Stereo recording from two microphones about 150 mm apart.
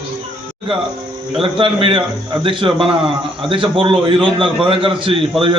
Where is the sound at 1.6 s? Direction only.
35° right (ahead or behind).